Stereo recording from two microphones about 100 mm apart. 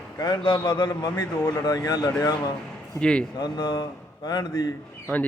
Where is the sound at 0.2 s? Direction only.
45° left (ahead or behind).